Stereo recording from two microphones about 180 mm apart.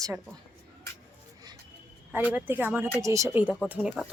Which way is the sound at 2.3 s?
10° right (ahead or behind).